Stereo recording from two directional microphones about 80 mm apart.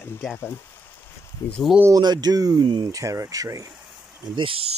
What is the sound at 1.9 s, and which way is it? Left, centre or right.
Speech, right.